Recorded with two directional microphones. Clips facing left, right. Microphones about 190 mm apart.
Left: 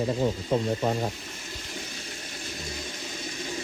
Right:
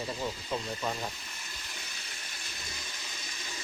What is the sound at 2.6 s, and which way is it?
Toilet flush, 45° left (ahead or behind).